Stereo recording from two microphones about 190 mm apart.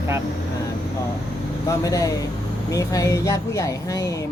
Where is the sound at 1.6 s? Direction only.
15° left (ahead or behind).